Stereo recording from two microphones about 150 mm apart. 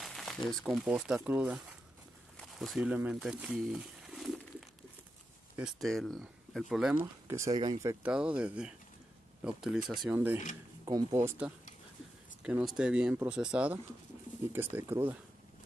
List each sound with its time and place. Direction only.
0.0 s a sound: centre (ahead or behind)
0.5 s speech: centre (ahead or behind)
2.3 s a sound: centre (ahead or behind)
5.6 s speech: centre (ahead or behind)
7.0 s speech: 20° right (ahead or behind)
8.0 s speech: 5° right (ahead or behind)
10.1 s speech: 15° right (ahead or behind)
12.7 s speech: 5° right (ahead or behind)